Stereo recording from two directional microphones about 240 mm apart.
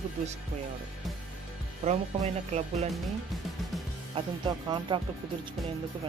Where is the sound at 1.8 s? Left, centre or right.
Right.